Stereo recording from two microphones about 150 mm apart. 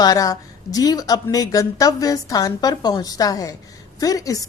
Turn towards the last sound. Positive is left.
turn(degrees=20)  # may be behind; listen again after turning